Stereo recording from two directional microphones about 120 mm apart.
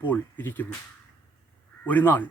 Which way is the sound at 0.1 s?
15° left (ahead or behind).